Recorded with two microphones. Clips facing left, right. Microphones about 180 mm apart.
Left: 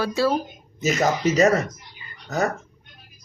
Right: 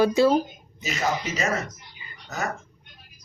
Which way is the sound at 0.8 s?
40° left (ahead or behind).